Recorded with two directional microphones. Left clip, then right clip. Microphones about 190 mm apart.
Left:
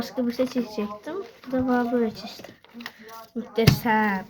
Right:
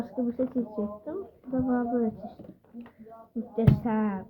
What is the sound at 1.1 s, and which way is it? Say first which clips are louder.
Speech: left 4 dB; 40° left (ahead or behind).